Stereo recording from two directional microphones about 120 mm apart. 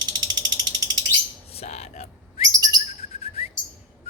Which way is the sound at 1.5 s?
60° left (ahead or behind).